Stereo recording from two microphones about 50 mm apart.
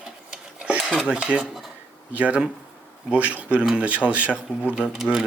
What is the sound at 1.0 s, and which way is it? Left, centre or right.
Speech, right.